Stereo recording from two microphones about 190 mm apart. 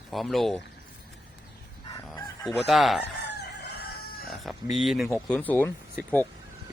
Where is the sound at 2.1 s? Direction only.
15° left (ahead or behind).